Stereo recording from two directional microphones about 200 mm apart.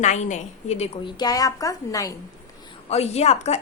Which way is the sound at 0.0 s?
35° left (ahead or behind).